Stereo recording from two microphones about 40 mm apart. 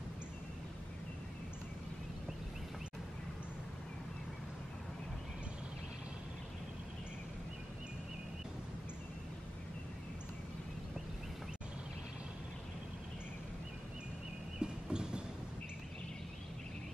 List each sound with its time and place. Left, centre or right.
14.6 s train: right